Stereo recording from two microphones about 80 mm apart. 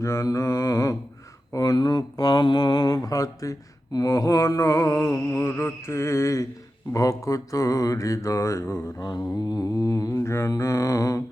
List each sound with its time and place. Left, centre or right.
0.0 s mantra: left
1.5 s mantra: left
9.0 s mantra: left